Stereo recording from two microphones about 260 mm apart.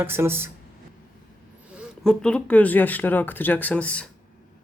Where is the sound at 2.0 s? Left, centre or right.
Centre.